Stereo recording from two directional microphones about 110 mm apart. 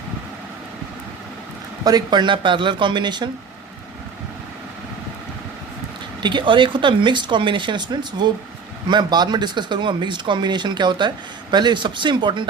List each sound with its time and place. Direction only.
1.8 s speech: 35° right (ahead or behind)
6.2 s speech: 45° right (ahead or behind)